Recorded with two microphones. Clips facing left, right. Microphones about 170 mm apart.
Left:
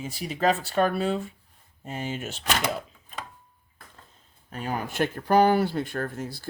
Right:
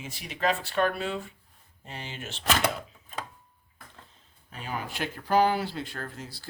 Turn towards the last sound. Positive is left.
turn(degrees=50)  # may be behind; listen again after turning